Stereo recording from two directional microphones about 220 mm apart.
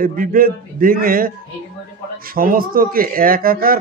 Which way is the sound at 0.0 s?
40° right (ahead or behind).